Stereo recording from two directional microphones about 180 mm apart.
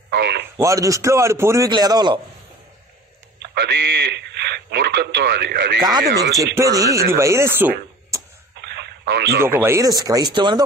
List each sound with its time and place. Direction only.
0.1 s a sound: 65° right (ahead or behind)
0.6 s a man's voice: 15° right (ahead or behind)
3.5 s speech: 75° right (ahead or behind)
6.5 s a man's voice: 20° right (ahead or behind)
8.5 s radio: 65° right (ahead or behind)
9.4 s speech: 15° right (ahead or behind)